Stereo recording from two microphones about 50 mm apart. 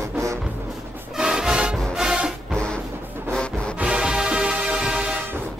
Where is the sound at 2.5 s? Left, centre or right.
Centre.